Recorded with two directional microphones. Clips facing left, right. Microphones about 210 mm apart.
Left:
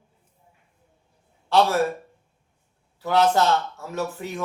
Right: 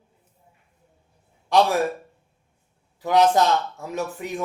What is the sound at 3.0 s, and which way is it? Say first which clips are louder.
A man's voice: right 2 dB; 15° right (ahead or behind).